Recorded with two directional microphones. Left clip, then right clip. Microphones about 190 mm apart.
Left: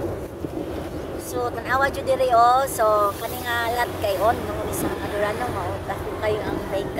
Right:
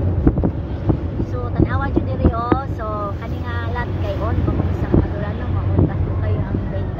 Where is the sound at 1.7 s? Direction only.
40° left (ahead or behind).